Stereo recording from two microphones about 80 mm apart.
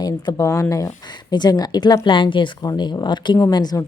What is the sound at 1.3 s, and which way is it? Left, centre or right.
A woman's voice, left.